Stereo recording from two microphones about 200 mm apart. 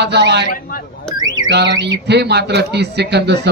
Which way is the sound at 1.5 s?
60° right (ahead or behind).